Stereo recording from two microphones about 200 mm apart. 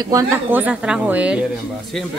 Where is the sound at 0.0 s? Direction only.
15° right (ahead or behind).